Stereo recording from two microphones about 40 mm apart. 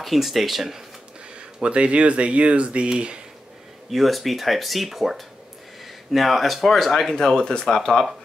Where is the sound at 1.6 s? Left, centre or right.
Right.